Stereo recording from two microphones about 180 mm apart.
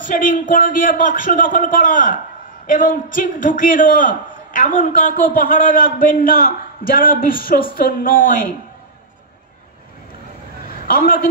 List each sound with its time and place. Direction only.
0.0 s a man's voice: 50° left (ahead or behind)
10.9 s a man's voice: 55° left (ahead or behind)